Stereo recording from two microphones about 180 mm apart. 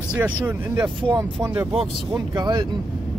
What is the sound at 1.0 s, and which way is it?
Speech, 25° right (ahead or behind).